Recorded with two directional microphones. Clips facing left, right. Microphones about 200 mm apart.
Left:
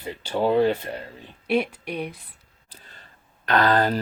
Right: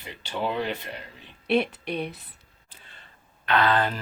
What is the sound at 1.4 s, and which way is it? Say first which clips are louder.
Speech: even; 10° left (ahead or behind).